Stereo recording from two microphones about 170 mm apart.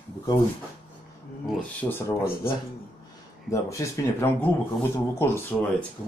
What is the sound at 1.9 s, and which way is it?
Speech, 15° left (ahead or behind).